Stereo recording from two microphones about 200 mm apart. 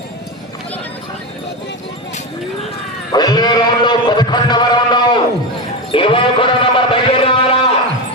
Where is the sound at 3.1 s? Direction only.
20° left (ahead or behind).